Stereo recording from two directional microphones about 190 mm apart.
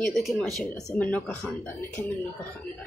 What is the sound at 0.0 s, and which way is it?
Speech, centre (ahead or behind).